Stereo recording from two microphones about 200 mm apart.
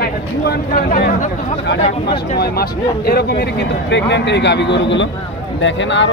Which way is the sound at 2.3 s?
50° left (ahead or behind).